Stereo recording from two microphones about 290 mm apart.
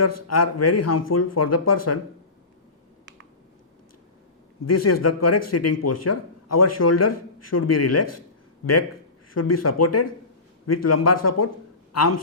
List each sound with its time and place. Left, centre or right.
0.0 s speech: left
4.6 s speech: left
9.3 s speech: left